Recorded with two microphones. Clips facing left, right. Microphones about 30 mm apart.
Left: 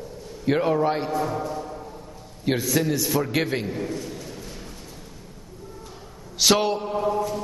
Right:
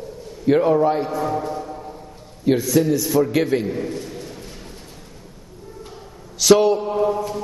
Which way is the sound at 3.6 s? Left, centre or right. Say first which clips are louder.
Right 4 dB; centre.